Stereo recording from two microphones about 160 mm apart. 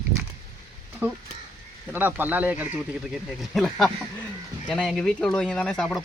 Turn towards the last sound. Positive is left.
turn(degrees=5)  # may be behind; listen again after turning